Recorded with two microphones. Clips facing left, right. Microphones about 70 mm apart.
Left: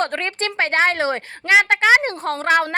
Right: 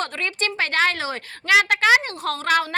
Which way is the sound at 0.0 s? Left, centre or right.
Left.